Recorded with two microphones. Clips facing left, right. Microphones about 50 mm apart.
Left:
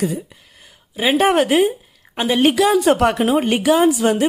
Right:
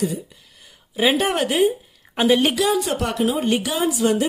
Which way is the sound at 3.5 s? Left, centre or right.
Left.